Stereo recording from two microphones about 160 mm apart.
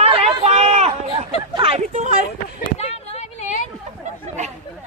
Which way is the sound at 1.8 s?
50° right (ahead or behind).